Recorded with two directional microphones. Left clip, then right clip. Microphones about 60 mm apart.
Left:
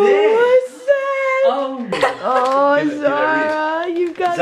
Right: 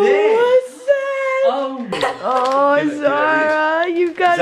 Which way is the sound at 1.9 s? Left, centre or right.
Left.